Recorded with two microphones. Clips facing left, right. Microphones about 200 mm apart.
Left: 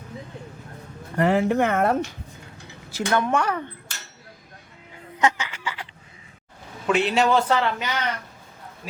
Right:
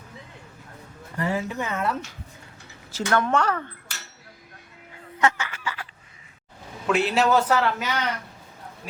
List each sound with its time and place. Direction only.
1.1 s speech: 60° left (ahead or behind)
2.9 s speech: 15° left (ahead or behind)
5.2 s a sound: 15° left (ahead or behind)
6.8 s a man's voice: centre (ahead or behind)